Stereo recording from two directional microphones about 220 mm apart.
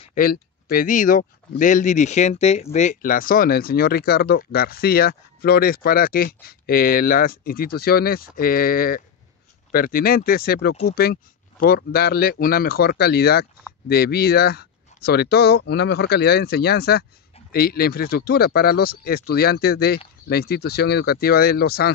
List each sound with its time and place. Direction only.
0.0 s speech: 40° left (ahead or behind)